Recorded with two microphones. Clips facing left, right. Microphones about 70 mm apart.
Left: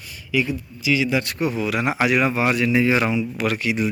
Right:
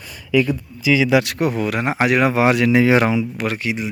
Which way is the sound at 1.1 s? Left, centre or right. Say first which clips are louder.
Right 6 dB; right.